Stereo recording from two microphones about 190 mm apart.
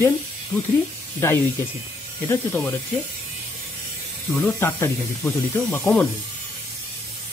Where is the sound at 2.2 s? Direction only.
10° left (ahead or behind).